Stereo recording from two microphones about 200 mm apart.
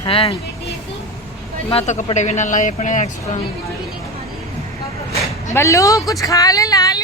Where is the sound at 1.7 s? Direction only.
35° left (ahead or behind).